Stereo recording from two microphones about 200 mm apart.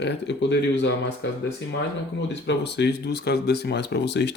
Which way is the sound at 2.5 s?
60° left (ahead or behind).